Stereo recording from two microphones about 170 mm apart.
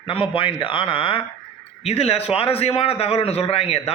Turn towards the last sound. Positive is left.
turn(degrees=35)  # may be behind; listen again after turning